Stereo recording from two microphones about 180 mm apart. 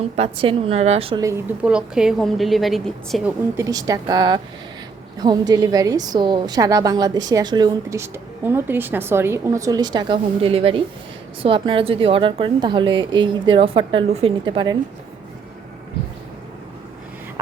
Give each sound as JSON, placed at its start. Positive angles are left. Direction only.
{"t": 0.2, "sound": "a woman's voice", "side_deg": -30}
{"t": 1.6, "sound": "a woman's voice", "side_deg": -5}
{"t": 3.6, "sound": "a woman's voice", "side_deg": -20}